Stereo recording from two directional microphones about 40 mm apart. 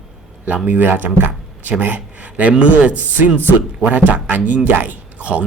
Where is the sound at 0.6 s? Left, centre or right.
Right.